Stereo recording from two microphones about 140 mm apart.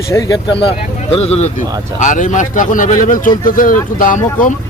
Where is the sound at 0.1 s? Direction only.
25° left (ahead or behind).